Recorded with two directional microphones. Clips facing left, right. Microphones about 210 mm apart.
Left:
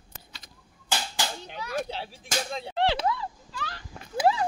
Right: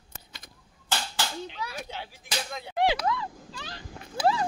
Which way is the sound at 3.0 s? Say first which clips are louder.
Left 1 dB; 35° left (ahead or behind).